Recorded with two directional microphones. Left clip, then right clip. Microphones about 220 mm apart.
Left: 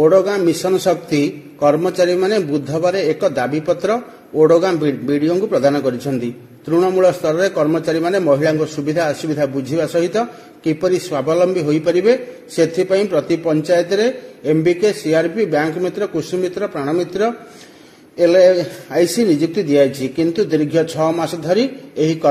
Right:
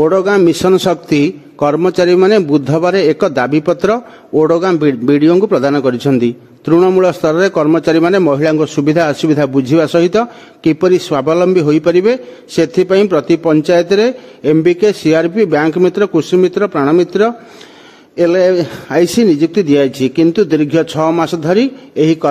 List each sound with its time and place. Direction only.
0.0 s a man's voice: 45° right (ahead or behind)